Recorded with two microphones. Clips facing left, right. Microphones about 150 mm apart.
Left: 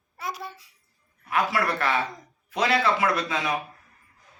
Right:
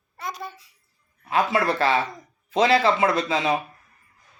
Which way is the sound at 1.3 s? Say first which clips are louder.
Right 3 dB; 25° right (ahead or behind).